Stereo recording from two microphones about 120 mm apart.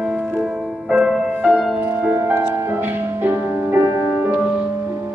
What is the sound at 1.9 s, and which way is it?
Music, 15° right (ahead or behind).